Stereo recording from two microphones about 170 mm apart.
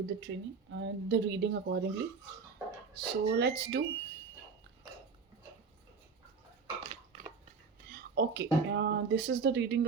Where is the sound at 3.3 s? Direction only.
90° right.